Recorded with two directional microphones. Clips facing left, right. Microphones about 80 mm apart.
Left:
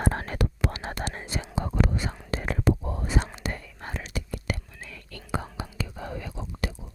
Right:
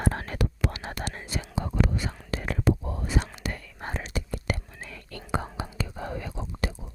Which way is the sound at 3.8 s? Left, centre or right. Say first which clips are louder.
Right 4 dB; right.